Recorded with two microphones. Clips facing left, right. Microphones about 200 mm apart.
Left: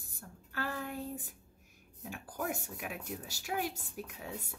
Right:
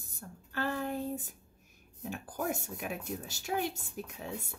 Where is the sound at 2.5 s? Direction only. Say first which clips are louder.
Right 3 dB; 25° right (ahead or behind).